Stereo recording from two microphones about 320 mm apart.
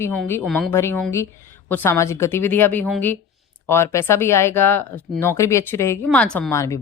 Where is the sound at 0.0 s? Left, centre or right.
Centre.